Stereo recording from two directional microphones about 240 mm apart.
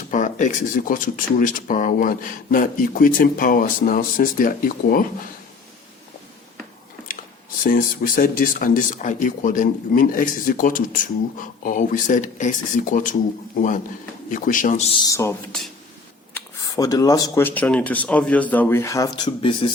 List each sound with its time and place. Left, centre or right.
0.1 s speech: left
7.1 s a sound: left
7.6 s speech: left
14.3 s a man's voice: left